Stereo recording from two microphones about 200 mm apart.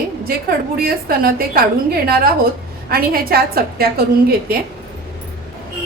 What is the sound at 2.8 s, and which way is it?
A woman's voice, 50° right (ahead or behind).